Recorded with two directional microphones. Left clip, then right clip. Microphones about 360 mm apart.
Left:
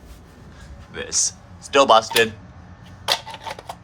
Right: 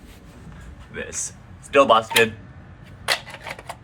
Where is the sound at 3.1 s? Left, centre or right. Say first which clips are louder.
Left 1 dB; centre.